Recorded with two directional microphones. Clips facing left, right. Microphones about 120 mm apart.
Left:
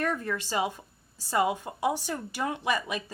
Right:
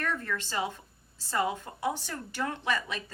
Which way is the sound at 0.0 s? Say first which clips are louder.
Left 3 dB; 15° left (ahead or behind).